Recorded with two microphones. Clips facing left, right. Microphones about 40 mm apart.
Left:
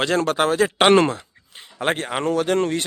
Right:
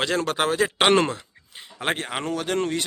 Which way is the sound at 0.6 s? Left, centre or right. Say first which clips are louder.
Left 5 dB; centre.